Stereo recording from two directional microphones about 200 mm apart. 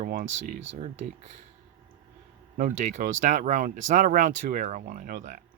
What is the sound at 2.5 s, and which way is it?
Speech, 40° right (ahead or behind).